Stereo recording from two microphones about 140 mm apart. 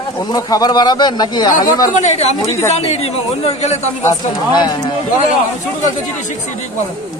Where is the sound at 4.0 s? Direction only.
25° left (ahead or behind).